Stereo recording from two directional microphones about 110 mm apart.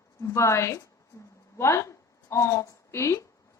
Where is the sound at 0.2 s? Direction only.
25° left (ahead or behind).